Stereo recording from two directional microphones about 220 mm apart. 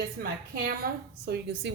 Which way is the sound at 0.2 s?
40° right (ahead or behind).